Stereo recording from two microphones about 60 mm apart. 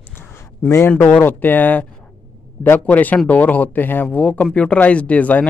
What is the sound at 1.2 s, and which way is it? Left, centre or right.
Speech, left.